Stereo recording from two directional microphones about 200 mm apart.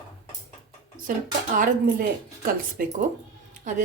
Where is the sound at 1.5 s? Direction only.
45° right (ahead or behind).